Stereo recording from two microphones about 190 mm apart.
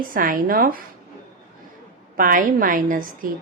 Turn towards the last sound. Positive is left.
turn(degrees=-45)  # may be behind; listen again after turning